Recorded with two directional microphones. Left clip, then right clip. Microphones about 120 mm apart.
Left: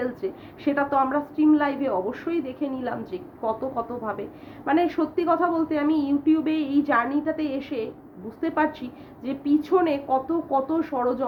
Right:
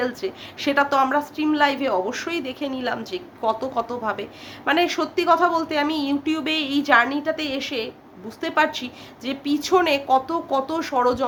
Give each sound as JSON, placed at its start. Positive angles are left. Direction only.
{"t": 0.0, "sound": "a woman's voice", "side_deg": -20}